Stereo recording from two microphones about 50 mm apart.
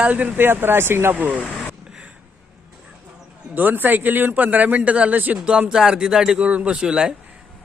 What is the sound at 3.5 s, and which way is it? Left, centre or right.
A man's voice, right.